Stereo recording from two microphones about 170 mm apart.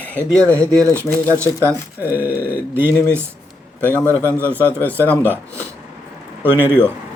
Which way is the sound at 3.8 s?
10° left (ahead or behind).